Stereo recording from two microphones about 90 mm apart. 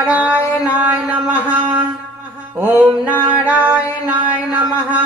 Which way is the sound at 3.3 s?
15° right (ahead or behind).